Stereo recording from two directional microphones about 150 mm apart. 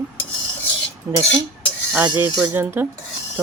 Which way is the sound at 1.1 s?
15° right (ahead or behind).